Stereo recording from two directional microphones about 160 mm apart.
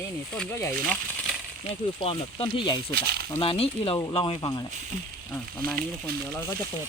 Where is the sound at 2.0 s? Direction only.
30° left (ahead or behind).